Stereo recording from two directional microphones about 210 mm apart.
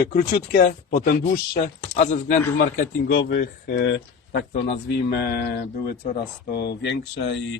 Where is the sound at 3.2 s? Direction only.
50° left (ahead or behind).